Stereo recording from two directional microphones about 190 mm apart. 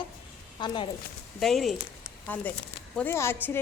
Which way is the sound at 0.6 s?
25° left (ahead or behind).